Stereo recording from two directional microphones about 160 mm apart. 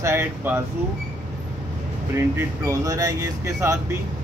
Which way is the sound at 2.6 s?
20° right (ahead or behind).